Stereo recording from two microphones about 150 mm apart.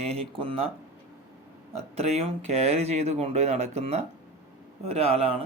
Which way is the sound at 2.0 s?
45° right (ahead or behind).